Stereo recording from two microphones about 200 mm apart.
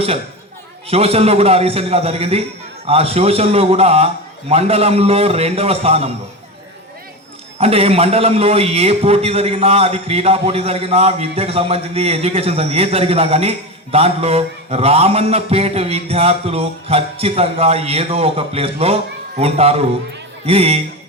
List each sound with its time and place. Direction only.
0.9 s a man's voice: 30° right (ahead or behind)
7.6 s a man's voice: 30° right (ahead or behind)